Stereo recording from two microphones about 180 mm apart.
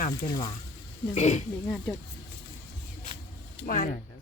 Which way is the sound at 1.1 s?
40° left (ahead or behind).